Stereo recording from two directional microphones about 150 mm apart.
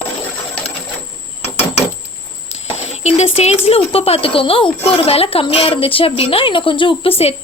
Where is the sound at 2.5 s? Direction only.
45° left (ahead or behind).